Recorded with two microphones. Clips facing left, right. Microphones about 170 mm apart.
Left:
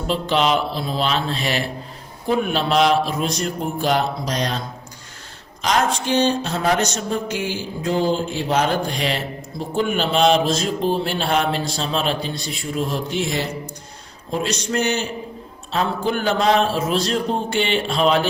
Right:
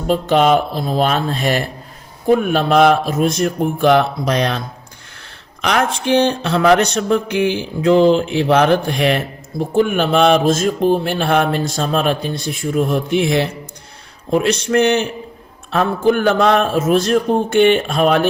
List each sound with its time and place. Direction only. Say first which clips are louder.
0.1 s a man's voice: right 6 dB; 50° right (ahead or behind)
5.6 s mantra: right 3 dB; 60° right (ahead or behind)
15.7 s a man's voice: right 6 dB; 55° right (ahead or behind)